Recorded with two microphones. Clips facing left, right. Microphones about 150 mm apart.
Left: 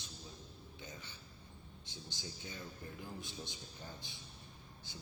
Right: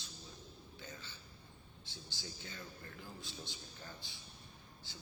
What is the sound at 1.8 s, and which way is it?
A man's voice, 20° left (ahead or behind).